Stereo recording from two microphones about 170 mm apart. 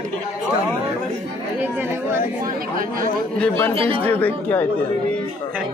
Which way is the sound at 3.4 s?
10° left (ahead or behind).